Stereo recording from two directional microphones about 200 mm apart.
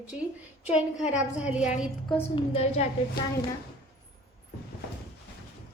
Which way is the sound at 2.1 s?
30° left (ahead or behind).